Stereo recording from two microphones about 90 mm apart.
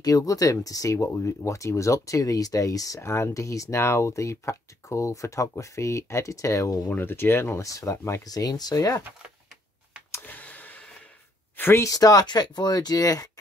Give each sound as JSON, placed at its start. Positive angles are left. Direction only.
{"t": 0.0, "sound": "speech", "side_deg": 40}
{"t": 6.9, "sound": "speech", "side_deg": 25}
{"t": 10.2, "sound": "a sound", "side_deg": 15}
{"t": 11.5, "sound": "speech", "side_deg": 25}
{"t": 11.8, "sound": "speech", "side_deg": 40}